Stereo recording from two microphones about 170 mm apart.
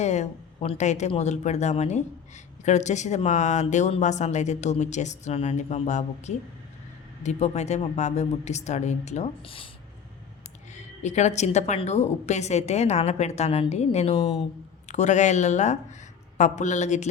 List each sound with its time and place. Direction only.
0.0 s a woman's voice: 40° left (ahead or behind)
10.7 s a woman's voice: 45° left (ahead or behind)